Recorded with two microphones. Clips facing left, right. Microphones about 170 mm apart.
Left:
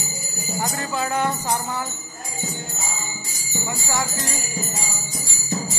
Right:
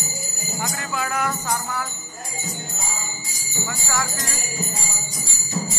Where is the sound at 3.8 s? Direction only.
20° left (ahead or behind).